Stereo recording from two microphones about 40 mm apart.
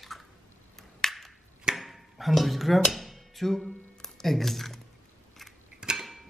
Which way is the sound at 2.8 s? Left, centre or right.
Centre.